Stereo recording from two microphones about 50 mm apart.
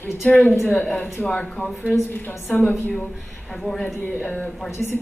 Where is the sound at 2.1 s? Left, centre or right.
Left.